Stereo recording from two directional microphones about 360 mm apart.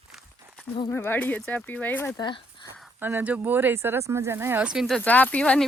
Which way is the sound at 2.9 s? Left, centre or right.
Centre.